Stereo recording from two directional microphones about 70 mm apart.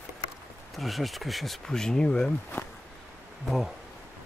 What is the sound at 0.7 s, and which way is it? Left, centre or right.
Speech, centre.